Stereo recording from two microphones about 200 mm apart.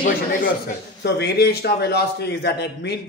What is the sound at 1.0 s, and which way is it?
A man's voice, 55° left (ahead or behind).